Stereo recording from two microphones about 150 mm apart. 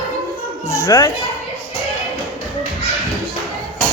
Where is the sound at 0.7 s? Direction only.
25° left (ahead or behind).